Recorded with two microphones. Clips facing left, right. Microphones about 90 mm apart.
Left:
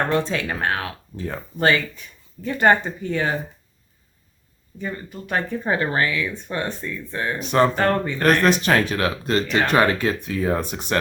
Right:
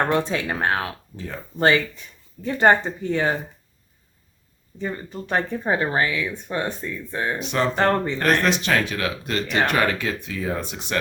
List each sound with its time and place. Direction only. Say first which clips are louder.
0.1 s speech: even; 20° right (ahead or behind)
4.8 s speech: right 1 dB; 25° right (ahead or behind)
5.5 s speech: even; 20° right (ahead or behind)
7.3 s speech: left 7 dB; 45° left (ahead or behind)
7.8 s speech: even; 25° right (ahead or behind)
8.2 s speech: left 6 dB; 45° left (ahead or behind)